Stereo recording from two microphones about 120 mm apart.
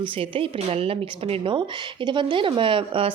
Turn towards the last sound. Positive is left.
turn(degrees=-45)  # may be behind; listen again after turning